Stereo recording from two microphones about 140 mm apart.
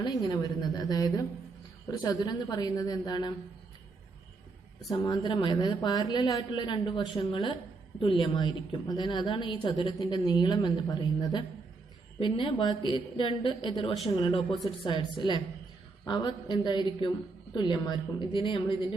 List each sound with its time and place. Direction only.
0.0 s a woman's voice: 30° left (ahead or behind)
4.9 s a woman's voice: 30° left (ahead or behind)